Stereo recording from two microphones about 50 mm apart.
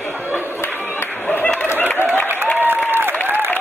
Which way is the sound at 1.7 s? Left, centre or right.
Left.